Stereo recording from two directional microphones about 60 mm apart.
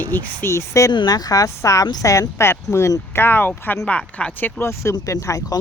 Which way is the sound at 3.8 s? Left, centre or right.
Centre.